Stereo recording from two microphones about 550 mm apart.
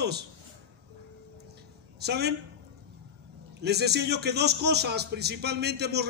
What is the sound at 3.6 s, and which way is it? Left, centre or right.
A man's voice, centre.